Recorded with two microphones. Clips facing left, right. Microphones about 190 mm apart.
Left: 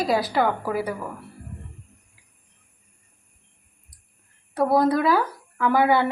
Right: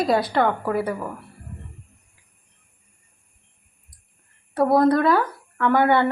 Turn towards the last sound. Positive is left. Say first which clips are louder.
# right 1 dB
turn(degrees=5)  # may be behind; listen again after turning